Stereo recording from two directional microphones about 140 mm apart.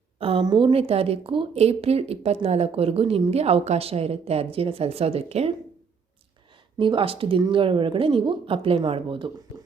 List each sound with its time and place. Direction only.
0.2 s a woman's voice: 40° right (ahead or behind)
6.7 s speech: 35° right (ahead or behind)